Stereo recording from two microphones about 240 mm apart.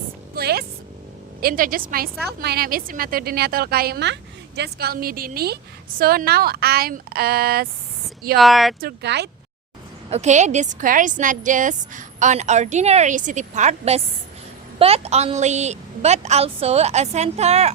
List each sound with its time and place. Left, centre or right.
0.3 s a sound: right
1.4 s a woman's voice: right
8.4 s speech: centre
8.8 s speech: right
10.1 s a woman's voice: right